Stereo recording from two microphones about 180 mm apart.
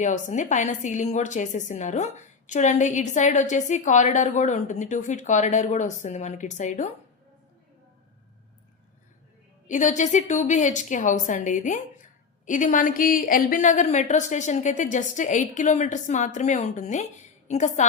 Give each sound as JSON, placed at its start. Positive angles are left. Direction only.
{"t": 0.0, "sound": "a woman's voice", "side_deg": 45}
{"t": 9.6, "sound": "a woman's voice", "side_deg": 45}